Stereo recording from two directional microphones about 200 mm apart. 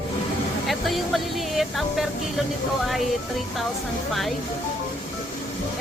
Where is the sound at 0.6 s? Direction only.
Centre (ahead or behind).